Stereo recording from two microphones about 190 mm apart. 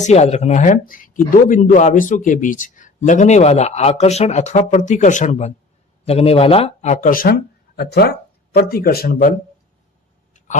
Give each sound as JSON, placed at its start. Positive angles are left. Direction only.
{"t": 0.0, "sound": "speech", "side_deg": 35}
{"t": 7.8, "sound": "speech", "side_deg": 60}